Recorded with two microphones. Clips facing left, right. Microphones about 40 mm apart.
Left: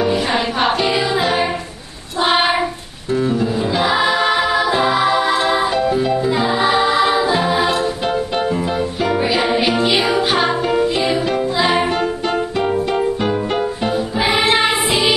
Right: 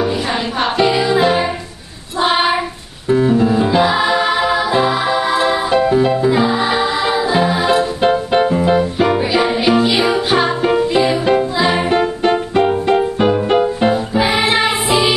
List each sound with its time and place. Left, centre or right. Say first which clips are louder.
0.0 s music: left 1 dB; centre
2.2 s child singing: right 1 dB; centre
3.1 s music: right 5 dB; centre
3.8 s music: right 1 dB; centre
5.7 s music: right 3 dB; centre
8.0 s music: right 5 dB; right
9.2 s music: right 1 dB; centre
11.9 s music: right 4 dB; right
13.3 s music: right 5 dB; centre
13.9 s music: right 1 dB; centre